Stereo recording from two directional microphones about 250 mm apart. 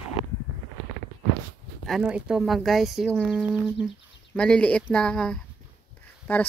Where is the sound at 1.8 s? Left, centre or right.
Centre.